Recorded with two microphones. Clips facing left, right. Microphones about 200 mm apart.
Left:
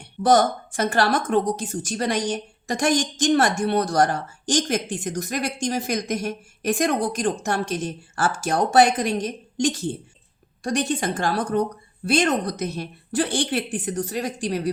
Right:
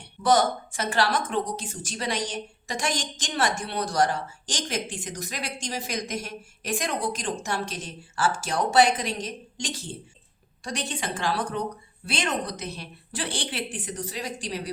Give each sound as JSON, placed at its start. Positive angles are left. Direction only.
{"t": 0.2, "sound": "a woman's voice", "side_deg": 45}